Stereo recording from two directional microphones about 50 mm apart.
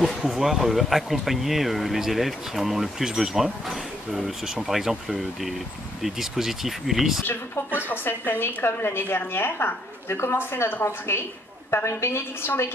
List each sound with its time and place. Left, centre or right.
0.0 s speech: centre
7.2 s a woman's voice: left